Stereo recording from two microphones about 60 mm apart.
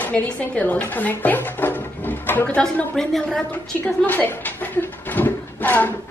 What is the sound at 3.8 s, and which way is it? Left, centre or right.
Speech, left.